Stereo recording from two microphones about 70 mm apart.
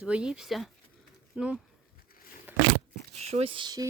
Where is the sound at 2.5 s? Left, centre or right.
Right.